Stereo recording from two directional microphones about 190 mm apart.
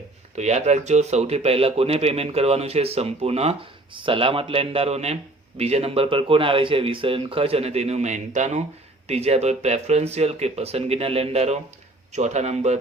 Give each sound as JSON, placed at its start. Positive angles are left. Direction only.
{"t": 0.3, "sound": "speech", "side_deg": -35}